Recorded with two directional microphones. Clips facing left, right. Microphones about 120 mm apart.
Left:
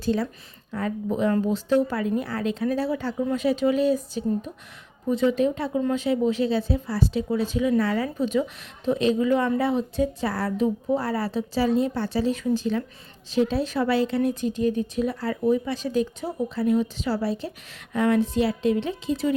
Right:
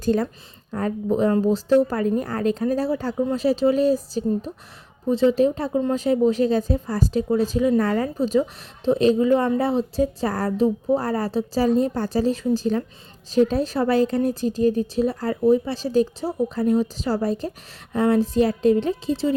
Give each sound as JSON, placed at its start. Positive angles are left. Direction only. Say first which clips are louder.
{"t": 0.0, "sound": "a woman's voice", "louder": "right 3 dB", "side_deg": -50}